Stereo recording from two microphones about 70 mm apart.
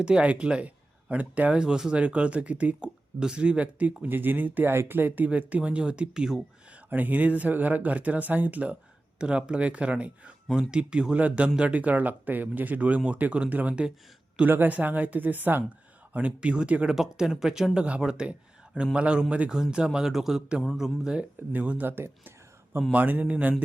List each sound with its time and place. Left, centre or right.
0.0 s speech: centre
6.9 s speech: right
16.9 s speech: centre
21.5 s speech: right